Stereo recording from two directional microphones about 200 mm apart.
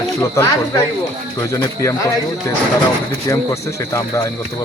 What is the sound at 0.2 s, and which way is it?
Speech, 15° left (ahead or behind).